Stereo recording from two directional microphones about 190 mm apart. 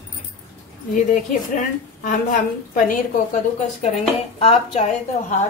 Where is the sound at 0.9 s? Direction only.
45° left (ahead or behind).